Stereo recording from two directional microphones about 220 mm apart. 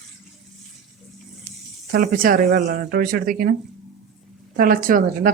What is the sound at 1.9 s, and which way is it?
Speech, 40° right (ahead or behind).